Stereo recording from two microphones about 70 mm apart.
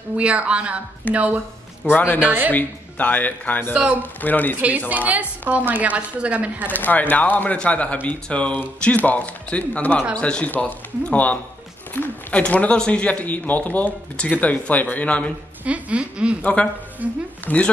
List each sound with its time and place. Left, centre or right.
0.2 s a woman's voice: centre
1.9 s speech: left
2.1 s a woman's voice: right
2.5 s speech: left
3.7 s speech: centre
4.0 s speech: left
4.6 s a woman's voice: right
6.7 s speech: left
15.6 s a woman's voice: centre
17.5 s speech: centre